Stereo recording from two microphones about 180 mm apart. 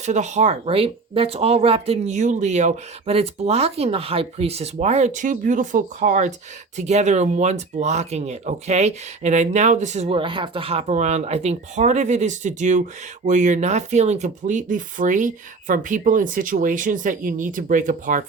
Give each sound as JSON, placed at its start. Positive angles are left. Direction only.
{"t": 0.0, "sound": "speech", "side_deg": -40}